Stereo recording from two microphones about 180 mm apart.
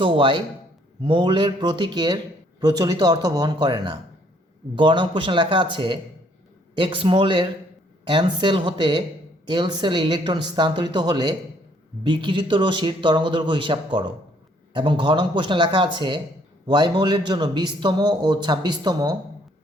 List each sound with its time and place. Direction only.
0.0 s speech: 30° right (ahead or behind)